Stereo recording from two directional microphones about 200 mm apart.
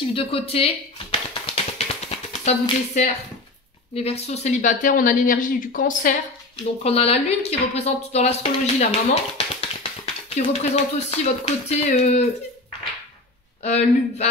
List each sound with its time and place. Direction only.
0.1 s speech: 30° left (ahead or behind)
1.4 s music: 30° left (ahead or behind)
3.9 s a woman's voice: 30° left (ahead or behind)
6.8 s a woman's voice: 30° left (ahead or behind)
13.6 s a woman's voice: 35° left (ahead or behind)